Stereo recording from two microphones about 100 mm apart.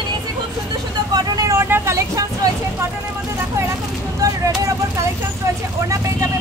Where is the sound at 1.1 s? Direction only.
40° right (ahead or behind).